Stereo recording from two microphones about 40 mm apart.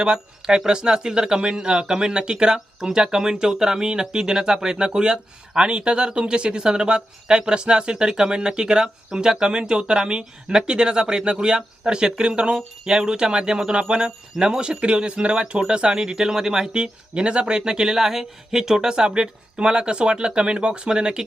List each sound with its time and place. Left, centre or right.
0.0 s speech: centre